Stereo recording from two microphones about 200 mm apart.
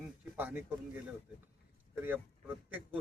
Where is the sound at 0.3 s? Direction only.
10° right (ahead or behind).